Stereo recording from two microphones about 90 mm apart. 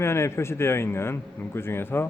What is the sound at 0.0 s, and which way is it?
A man's voice, 30° left (ahead or behind).